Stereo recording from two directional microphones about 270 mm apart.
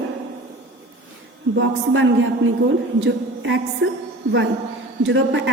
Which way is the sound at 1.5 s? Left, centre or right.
Right.